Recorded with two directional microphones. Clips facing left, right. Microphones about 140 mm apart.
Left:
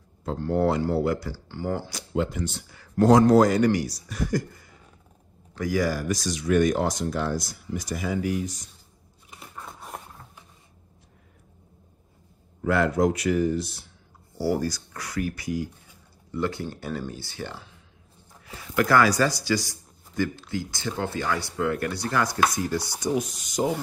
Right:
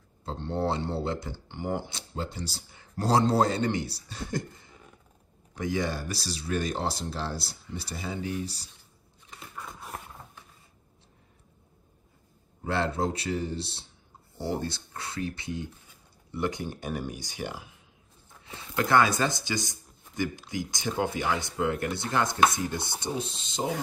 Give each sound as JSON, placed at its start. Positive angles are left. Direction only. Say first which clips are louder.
{"t": 0.2, "sound": "speech", "louder": "left 6 dB", "side_deg": -25}
{"t": 9.3, "sound": "a sound", "louder": "left 1 dB", "side_deg": 10}
{"t": 12.6, "sound": "speech", "louder": "left 6 dB", "side_deg": -30}